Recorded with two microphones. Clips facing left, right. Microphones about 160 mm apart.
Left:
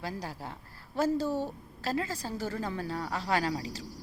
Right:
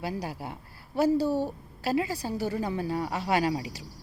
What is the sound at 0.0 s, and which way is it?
A woman's voice, 15° right (ahead or behind).